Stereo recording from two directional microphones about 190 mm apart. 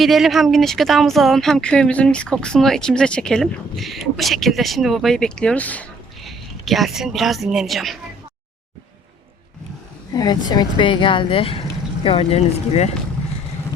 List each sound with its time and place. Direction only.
0.0 s speech: centre (ahead or behind)
10.2 s speech: 20° left (ahead or behind)